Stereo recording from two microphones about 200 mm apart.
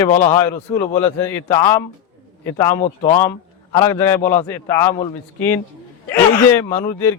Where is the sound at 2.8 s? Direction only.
35° left (ahead or behind).